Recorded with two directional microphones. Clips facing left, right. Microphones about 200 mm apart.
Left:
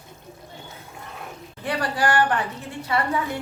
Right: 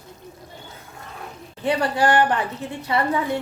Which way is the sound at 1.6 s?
25° right (ahead or behind).